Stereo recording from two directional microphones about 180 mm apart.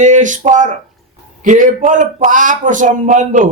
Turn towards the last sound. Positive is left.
turn(degrees=-45)  # may be behind; listen again after turning